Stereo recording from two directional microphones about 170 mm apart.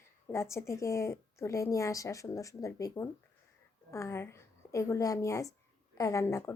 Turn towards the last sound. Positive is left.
turn(degrees=15)  # may be behind; listen again after turning